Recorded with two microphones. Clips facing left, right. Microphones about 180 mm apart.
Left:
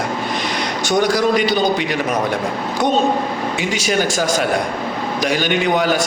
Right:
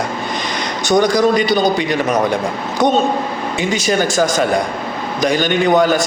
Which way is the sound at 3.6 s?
10° left (ahead or behind).